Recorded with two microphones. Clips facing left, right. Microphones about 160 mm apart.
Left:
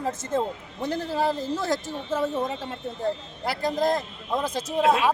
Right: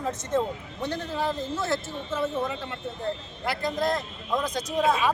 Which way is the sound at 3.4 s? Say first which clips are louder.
Left 3 dB; 35° left (ahead or behind).